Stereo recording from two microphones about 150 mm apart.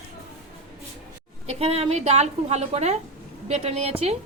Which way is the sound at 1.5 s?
40° right (ahead or behind).